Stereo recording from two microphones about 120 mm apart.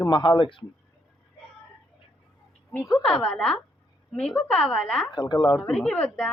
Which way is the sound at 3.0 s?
5° left (ahead or behind).